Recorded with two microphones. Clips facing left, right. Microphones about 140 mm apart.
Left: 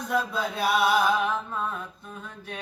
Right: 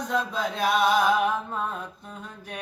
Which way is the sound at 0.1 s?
10° left (ahead or behind).